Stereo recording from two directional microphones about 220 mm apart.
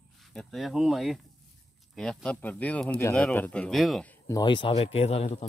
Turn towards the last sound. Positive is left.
turn(degrees=30)  # may be behind; listen again after turning